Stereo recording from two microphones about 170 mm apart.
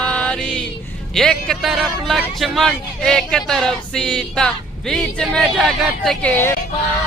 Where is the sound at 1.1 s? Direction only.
5° left (ahead or behind).